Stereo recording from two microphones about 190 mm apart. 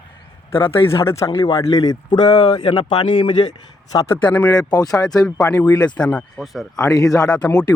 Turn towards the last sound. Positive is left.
turn(degrees=5)  # may be behind; listen again after turning